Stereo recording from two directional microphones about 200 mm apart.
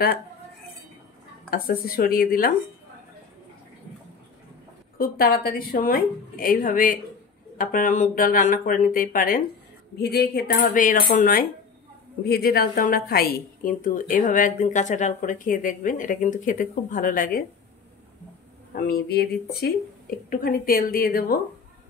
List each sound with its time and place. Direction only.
1.5 s a woman's voice: 50° left (ahead or behind)
4.9 s a woman's voice: 45° left (ahead or behind)
18.8 s a woman's voice: 50° left (ahead or behind)
20.2 s a woman's voice: 45° left (ahead or behind)